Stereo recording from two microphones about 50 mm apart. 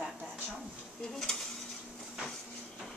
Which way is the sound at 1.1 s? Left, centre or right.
Centre.